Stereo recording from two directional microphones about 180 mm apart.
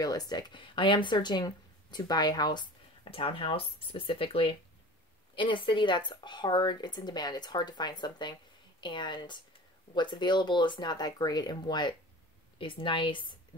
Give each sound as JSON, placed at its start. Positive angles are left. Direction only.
{"t": 0.0, "sound": "speech", "side_deg": 20}